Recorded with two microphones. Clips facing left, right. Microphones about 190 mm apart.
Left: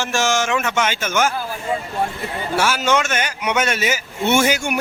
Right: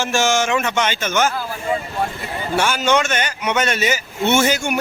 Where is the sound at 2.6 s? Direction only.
5° left (ahead or behind).